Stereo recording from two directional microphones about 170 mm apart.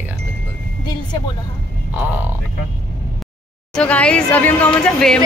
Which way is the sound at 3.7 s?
5° left (ahead or behind).